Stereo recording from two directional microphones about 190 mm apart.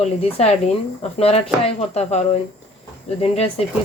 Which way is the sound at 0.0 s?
35° left (ahead or behind).